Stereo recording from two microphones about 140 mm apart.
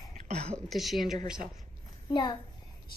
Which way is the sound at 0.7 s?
Centre (ahead or behind).